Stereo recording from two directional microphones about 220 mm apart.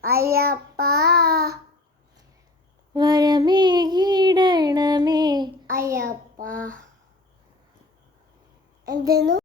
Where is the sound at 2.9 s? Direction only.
20° right (ahead or behind).